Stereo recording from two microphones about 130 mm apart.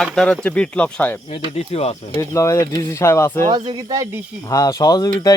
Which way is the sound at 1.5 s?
55° left (ahead or behind).